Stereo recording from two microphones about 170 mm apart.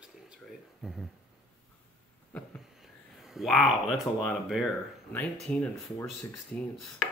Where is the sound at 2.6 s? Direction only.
Centre (ahead or behind).